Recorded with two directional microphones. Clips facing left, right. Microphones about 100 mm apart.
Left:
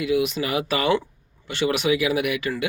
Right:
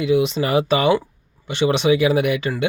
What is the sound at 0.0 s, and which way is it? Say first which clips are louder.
Speech: right 4 dB; 25° right (ahead or behind).